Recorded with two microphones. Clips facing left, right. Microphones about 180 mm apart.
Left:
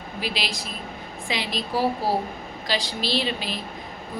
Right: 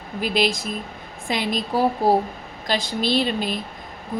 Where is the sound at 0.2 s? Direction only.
50° right (ahead or behind).